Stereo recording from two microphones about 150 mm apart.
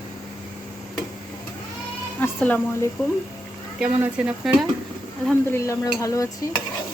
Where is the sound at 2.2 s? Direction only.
15° left (ahead or behind).